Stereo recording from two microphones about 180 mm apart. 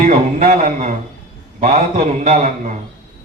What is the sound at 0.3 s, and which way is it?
A man's voice, 35° right (ahead or behind).